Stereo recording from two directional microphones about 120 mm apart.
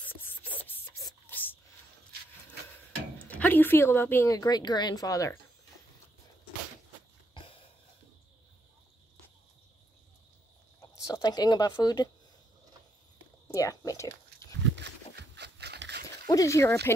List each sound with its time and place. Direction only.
0.0 s rub: 15° left (ahead or behind)
1.3 s a sound: 15° left (ahead or behind)
3.3 s speech: 15° left (ahead or behind)
4.3 s speech: 35° left (ahead or behind)
7.3 s sniff: 50° left (ahead or behind)
11.1 s speech: 30° left (ahead or behind)
13.5 s a sound: 30° left (ahead or behind)
16.3 s speech: 25° left (ahead or behind)